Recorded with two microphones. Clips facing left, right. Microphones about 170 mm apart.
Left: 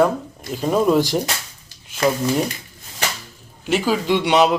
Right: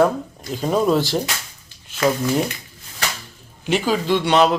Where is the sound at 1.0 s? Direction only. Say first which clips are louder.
Left 2 dB; 15° left (ahead or behind).